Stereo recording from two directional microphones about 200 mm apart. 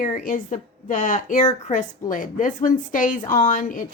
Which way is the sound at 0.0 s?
40° left (ahead or behind).